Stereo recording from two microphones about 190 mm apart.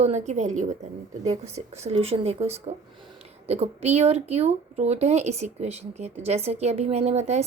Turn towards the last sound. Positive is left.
turn(degrees=-35)  # may be behind; listen again after turning